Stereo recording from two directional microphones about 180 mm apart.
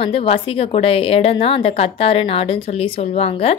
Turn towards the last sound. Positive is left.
turn(degrees=35)  # may be behind; listen again after turning